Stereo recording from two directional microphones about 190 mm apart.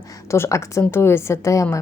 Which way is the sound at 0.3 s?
15° left (ahead or behind).